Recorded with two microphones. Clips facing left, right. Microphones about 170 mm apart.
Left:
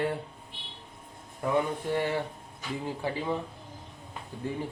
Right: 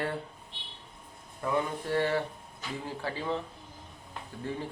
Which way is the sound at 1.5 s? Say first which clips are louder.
Left 1 dB; 15° left (ahead or behind).